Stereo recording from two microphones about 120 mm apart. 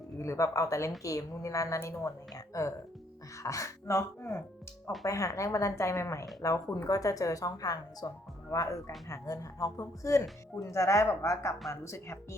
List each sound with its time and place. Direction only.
0.2 s a woman's voice: 25° left (ahead or behind)